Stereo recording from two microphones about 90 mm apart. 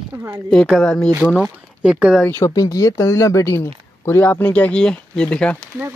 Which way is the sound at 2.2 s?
30° left (ahead or behind).